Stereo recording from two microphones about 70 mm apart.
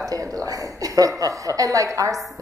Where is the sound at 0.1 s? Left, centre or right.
Right.